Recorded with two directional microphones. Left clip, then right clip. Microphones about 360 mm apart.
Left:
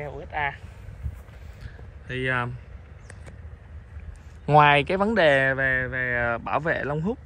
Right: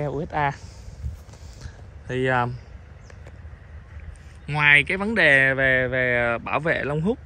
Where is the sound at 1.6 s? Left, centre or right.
Centre.